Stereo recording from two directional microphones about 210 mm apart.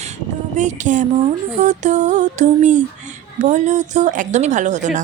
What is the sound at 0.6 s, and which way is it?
Music, 35° right (ahead or behind).